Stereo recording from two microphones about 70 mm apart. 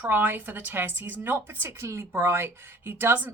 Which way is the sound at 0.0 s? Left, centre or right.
Right.